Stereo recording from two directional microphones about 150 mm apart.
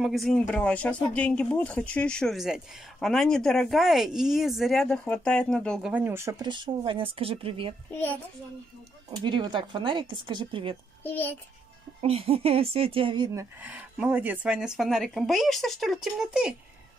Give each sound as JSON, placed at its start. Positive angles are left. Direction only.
{"t": 0.0, "sound": "speech", "side_deg": 0}
{"t": 5.9, "sound": "speech", "side_deg": -10}
{"t": 6.4, "sound": "speech", "side_deg": -30}
{"t": 9.2, "sound": "speech", "side_deg": -30}
{"t": 11.1, "sound": "a child's voice", "side_deg": 10}
{"t": 12.0, "sound": "speech", "side_deg": -40}